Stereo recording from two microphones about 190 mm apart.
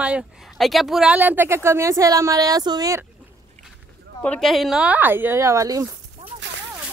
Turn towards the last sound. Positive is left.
turn(degrees=-15)  # may be behind; listen again after turning